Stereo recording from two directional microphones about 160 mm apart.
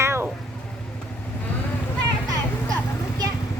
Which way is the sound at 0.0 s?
15° right (ahead or behind).